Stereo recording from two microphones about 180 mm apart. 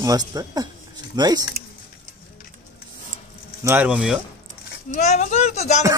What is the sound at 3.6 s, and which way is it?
Speech, 10° right (ahead or behind).